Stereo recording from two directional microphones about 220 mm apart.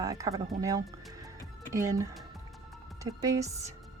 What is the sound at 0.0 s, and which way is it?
A woman's voice, 15° right (ahead or behind).